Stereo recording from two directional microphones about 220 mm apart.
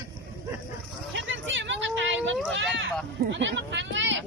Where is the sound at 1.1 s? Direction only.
60° right (ahead or behind).